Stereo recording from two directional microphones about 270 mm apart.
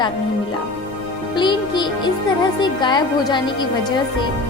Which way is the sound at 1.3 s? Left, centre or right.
Centre.